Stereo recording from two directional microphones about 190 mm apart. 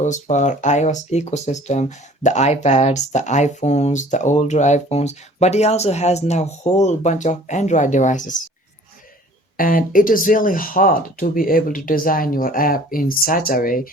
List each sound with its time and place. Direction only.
0.0 s speech: 40° left (ahead or behind)
9.6 s speech: 50° left (ahead or behind)